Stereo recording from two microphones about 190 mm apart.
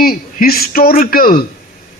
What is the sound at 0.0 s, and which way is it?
A man's voice, 50° left (ahead or behind).